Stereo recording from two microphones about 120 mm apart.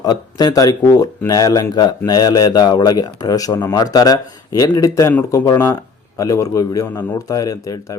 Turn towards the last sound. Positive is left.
turn(degrees=30)  # may be behind; listen again after turning